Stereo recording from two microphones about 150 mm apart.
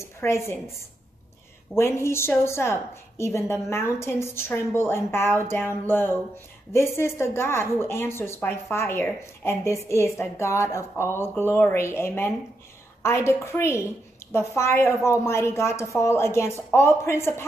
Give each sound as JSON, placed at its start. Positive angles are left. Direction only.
{"t": 0.2, "sound": "speech", "side_deg": 15}
{"t": 1.8, "sound": "a woman's voice", "side_deg": 15}